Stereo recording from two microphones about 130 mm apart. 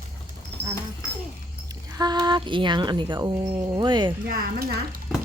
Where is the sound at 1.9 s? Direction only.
30° right (ahead or behind).